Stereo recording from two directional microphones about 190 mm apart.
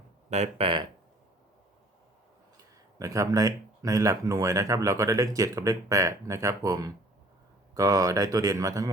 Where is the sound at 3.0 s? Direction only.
15° right (ahead or behind).